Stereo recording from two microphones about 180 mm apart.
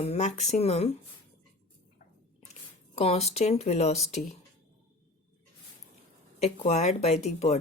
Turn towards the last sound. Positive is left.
turn(degrees=35)  # may be behind; listen again after turning